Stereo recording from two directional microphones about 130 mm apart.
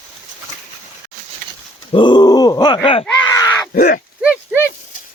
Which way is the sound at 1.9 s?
40° left (ahead or behind).